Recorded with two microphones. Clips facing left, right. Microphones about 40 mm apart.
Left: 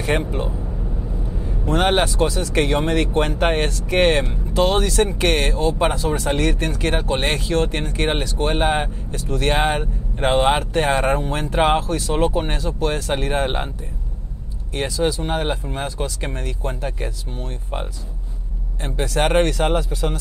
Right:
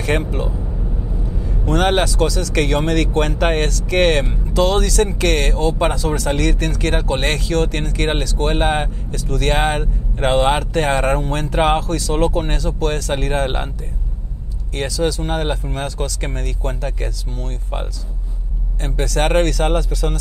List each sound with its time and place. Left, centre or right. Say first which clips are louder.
0.0 s speech: right 1 dB; right
0.6 s vehicle: right 2 dB; centre
1.2 s vehicle: right 2 dB; left
1.7 s speech: right 1 dB; right
14.7 s speech: right 1 dB; right